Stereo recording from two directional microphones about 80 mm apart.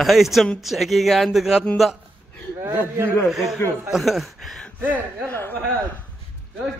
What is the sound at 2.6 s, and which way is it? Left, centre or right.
Speech, right.